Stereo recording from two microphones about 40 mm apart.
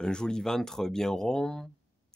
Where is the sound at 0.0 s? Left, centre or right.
Centre.